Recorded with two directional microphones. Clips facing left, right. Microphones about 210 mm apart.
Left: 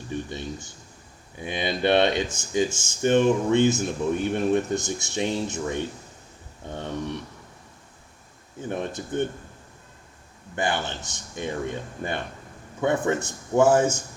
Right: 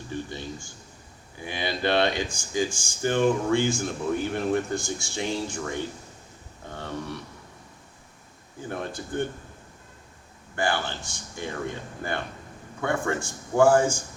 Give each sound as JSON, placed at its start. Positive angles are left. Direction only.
{"t": 0.1, "sound": "speech", "side_deg": 20}
{"t": 8.7, "sound": "speech", "side_deg": 20}
{"t": 10.5, "sound": "speech", "side_deg": 20}
{"t": 12.8, "sound": "speech", "side_deg": 20}